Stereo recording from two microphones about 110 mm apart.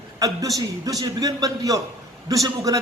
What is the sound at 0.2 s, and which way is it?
A man's voice, 30° right (ahead or behind).